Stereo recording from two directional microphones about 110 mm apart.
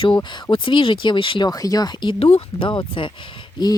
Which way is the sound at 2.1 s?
65° left (ahead or behind).